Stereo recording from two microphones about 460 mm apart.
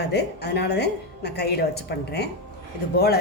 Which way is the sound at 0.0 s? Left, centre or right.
Left.